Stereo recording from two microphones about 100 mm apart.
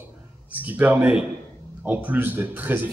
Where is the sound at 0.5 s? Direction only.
15° right (ahead or behind).